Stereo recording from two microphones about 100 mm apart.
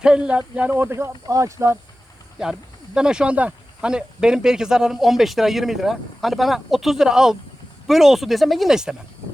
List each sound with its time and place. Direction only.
0.0 s speech: 10° right (ahead or behind)
0.7 s speech: 25° right (ahead or behind)
2.4 s speech: 5° right (ahead or behind)